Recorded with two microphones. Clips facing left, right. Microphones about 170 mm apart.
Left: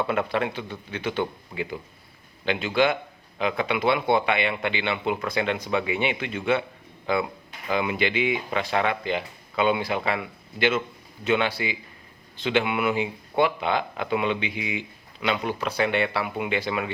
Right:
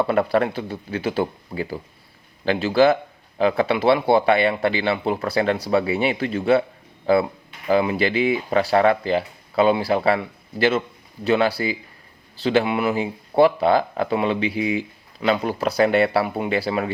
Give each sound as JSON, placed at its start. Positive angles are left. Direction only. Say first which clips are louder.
{"t": 0.0, "sound": "speech", "louder": "right 6 dB", "side_deg": -35}